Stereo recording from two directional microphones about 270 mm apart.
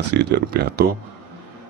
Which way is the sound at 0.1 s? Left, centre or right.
Right.